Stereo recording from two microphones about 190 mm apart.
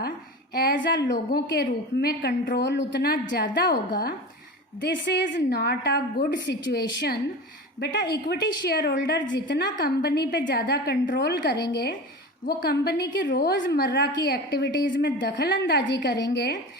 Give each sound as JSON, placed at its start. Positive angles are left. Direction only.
{"t": 0.5, "sound": "a woman's voice", "side_deg": 60}
{"t": 1.3, "sound": "a woman's voice", "side_deg": 55}
{"t": 8.3, "sound": "a woman's voice", "side_deg": 55}